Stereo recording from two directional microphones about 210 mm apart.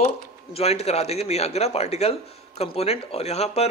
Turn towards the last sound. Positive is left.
turn(degrees=30)  # may be behind; listen again after turning